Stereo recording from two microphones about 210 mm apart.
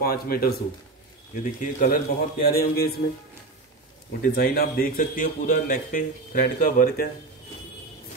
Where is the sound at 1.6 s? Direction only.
40° left (ahead or behind).